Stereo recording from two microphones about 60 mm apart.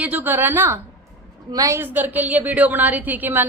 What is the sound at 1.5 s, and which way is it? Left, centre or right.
Speech, right.